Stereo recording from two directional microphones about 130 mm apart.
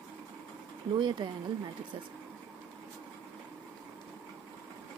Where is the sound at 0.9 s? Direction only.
35° right (ahead or behind).